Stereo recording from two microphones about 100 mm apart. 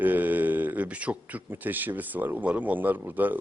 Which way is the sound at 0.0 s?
15° right (ahead or behind).